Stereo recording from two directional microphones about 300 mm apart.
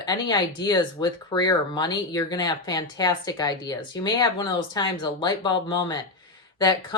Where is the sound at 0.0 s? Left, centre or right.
Centre.